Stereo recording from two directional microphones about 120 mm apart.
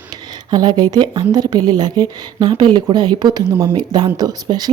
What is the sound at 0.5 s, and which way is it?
A woman's voice, 35° right (ahead or behind).